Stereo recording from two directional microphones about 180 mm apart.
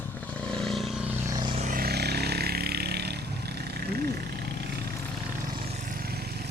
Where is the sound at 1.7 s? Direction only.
55° right (ahead or behind).